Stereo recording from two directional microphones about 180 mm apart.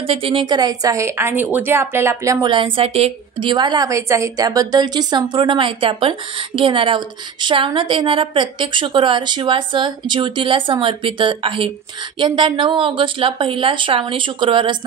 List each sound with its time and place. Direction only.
0.0 s a woman's voice: 30° right (ahead or behind)